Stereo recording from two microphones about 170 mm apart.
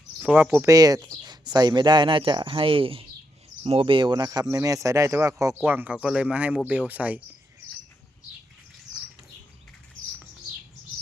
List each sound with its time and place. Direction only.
0.2 s speech: 10° right (ahead or behind)